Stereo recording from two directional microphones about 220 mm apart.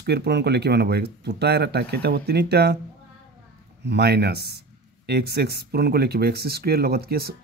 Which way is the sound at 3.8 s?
50° right (ahead or behind).